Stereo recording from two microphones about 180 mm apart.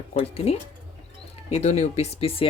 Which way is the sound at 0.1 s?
35° left (ahead or behind).